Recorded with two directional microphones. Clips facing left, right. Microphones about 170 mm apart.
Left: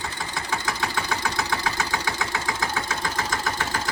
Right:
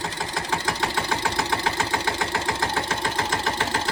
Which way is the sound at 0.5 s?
30° right (ahead or behind).